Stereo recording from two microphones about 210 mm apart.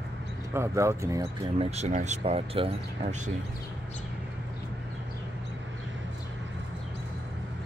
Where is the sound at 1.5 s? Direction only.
30° right (ahead or behind).